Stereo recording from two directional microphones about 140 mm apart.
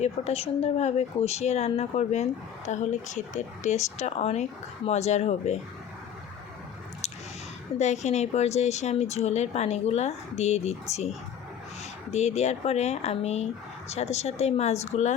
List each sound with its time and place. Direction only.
0.0 s a woman's voice: 50° left (ahead or behind)
7.8 s a woman's voice: 55° left (ahead or behind)
12.1 s a woman's voice: 50° left (ahead or behind)